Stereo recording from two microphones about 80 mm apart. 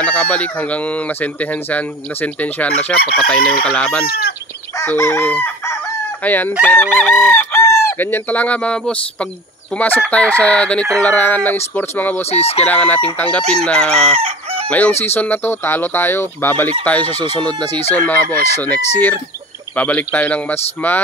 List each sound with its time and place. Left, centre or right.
0.0 s speech: centre
3.6 s chicken: left
4.9 s chicken: left
5.2 s chicken: left
9.8 s chicken: left
10.0 s speech: centre
11.0 s chicken: centre
13.4 s speech: centre
14.7 s chicken: centre